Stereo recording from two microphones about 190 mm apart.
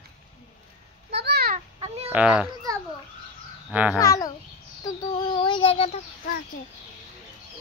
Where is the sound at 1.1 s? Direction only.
60° right (ahead or behind).